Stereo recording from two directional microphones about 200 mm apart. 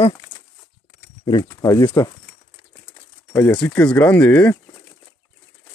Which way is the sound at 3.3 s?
10° left (ahead or behind).